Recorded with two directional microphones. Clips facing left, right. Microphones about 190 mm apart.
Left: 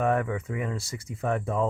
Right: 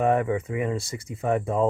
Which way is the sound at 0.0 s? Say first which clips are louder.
Right 4 dB; 20° right (ahead or behind).